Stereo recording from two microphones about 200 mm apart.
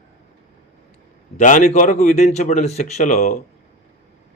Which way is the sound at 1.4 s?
40° left (ahead or behind).